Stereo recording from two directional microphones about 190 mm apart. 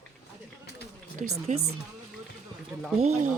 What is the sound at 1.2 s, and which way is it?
Speech, 35° right (ahead or behind).